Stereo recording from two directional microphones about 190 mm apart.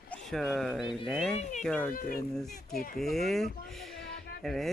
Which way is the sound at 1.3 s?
35° left (ahead or behind).